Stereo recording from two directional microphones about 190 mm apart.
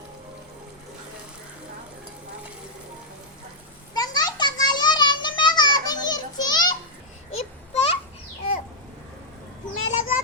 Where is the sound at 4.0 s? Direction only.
20° left (ahead or behind).